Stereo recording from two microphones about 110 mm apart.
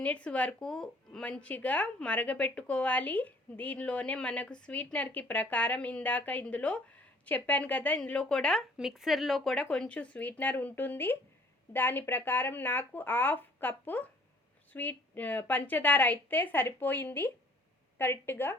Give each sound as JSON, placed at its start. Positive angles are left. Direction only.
{"t": 0.0, "sound": "a woman's voice", "side_deg": 10}